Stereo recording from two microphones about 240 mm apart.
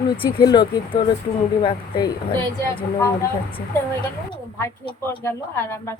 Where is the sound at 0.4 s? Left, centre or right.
Centre.